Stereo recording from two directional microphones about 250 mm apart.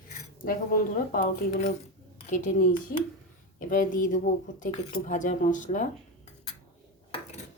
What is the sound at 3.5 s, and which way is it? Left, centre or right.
Speech, left.